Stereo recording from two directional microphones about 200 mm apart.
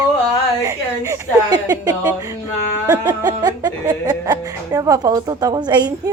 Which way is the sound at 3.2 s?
20° right (ahead or behind).